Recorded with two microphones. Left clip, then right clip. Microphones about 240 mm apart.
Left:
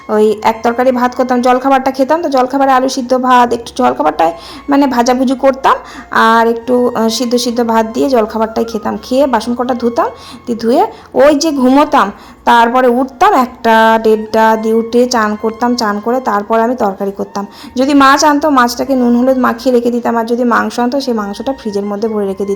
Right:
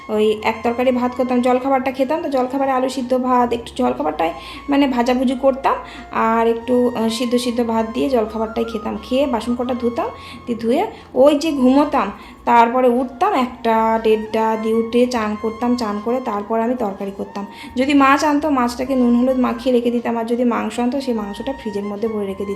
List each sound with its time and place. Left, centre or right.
0.1 s speech: left